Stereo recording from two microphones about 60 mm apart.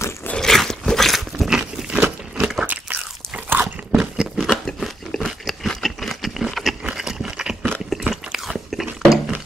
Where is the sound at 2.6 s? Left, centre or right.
Right.